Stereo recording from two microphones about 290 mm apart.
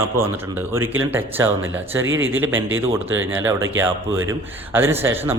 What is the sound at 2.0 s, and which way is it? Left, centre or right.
Speech, right.